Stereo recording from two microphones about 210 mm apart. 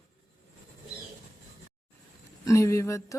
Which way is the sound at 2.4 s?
15° left (ahead or behind).